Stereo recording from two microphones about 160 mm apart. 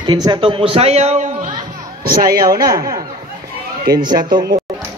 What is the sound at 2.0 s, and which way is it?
Speech, 65° right (ahead or behind).